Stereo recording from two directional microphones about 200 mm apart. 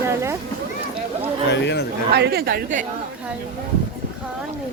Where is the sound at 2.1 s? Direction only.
55° right (ahead or behind).